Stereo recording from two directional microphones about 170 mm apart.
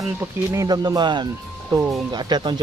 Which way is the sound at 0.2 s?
20° right (ahead or behind).